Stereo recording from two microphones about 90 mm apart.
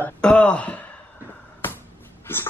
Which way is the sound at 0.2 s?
15° left (ahead or behind).